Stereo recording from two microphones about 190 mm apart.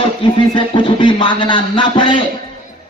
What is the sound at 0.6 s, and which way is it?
A man's voice, 25° left (ahead or behind).